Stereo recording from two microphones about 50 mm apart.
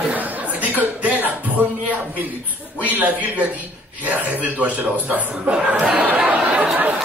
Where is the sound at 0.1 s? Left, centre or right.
Right.